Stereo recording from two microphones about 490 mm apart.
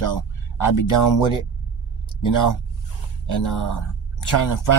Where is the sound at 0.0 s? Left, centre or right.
Left.